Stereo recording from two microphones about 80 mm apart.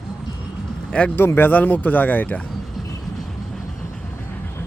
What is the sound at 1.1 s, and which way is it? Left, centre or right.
Speech, left.